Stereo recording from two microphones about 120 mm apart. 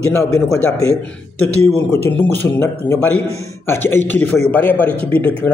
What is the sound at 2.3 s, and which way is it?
A man's voice, 20° left (ahead or behind).